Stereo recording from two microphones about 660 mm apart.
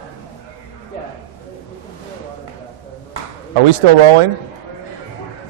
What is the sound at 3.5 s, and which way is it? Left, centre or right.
Speech, right.